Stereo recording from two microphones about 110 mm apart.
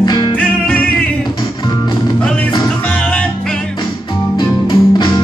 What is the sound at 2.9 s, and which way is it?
Music, 10° left (ahead or behind).